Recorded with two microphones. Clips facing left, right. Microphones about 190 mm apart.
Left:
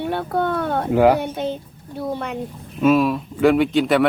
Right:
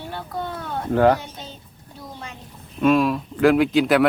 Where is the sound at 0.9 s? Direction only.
10° left (ahead or behind).